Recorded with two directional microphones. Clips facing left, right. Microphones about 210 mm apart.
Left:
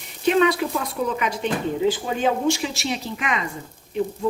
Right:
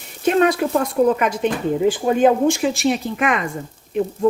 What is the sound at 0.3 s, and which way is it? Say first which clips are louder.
A woman's voice: right 2 dB; 50° right (ahead or behind).